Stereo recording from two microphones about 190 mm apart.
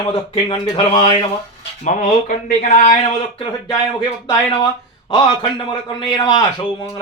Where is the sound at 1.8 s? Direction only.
40° left (ahead or behind).